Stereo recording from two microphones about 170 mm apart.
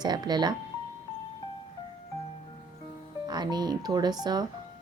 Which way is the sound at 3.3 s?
25° right (ahead or behind).